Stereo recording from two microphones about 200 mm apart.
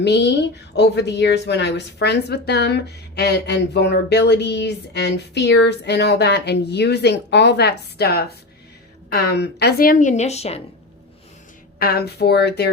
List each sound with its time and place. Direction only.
0.0 s a woman's voice: 60° left (ahead or behind); by 10.6 s 30° left (ahead or behind)
11.8 s a woman's voice: 50° left (ahead or behind)